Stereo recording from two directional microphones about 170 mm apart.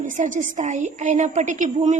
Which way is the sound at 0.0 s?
50° right (ahead or behind).